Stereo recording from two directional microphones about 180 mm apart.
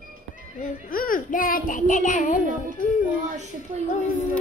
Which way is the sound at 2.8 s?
50° left (ahead or behind).